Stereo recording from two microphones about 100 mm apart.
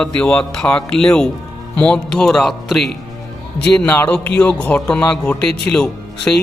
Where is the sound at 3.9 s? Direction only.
15° left (ahead or behind).